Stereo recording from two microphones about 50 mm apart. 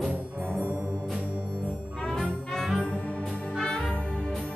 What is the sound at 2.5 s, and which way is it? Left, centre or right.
Music, centre.